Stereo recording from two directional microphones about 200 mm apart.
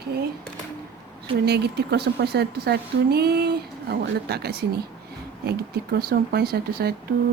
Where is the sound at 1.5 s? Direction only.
55° right (ahead or behind).